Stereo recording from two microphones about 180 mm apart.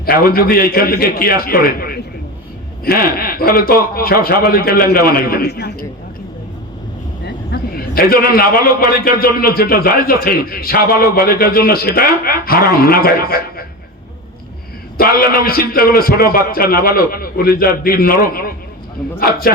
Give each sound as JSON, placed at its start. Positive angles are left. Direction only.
{"t": 0.0, "sound": "a man's voice", "side_deg": 55}
{"t": 7.3, "sound": "a man's voice", "side_deg": 55}
{"t": 14.9, "sound": "a man's voice", "side_deg": 55}